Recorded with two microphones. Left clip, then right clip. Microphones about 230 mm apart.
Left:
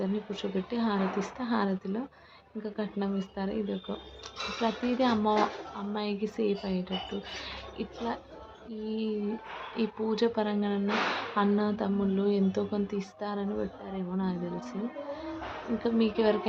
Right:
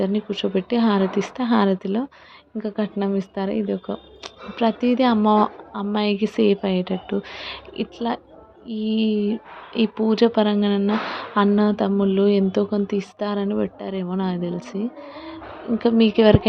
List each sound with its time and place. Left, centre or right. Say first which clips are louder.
0.0 s speech: right 10 dB; right
15.8 s speech: right 11 dB; right